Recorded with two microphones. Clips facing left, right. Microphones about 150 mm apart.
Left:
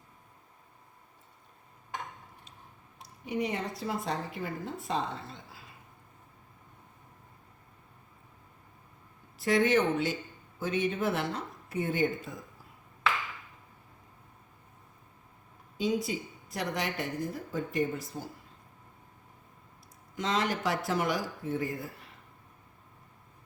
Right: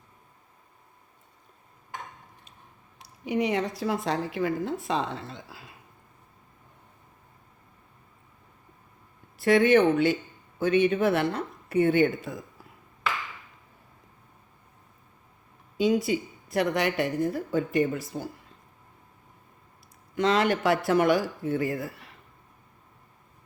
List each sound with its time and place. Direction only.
3.0 s speech: 90° right
9.4 s a woman's voice: 60° right (ahead or behind)
15.8 s a woman's voice: 70° right (ahead or behind)
20.1 s a woman's voice: 70° right (ahead or behind)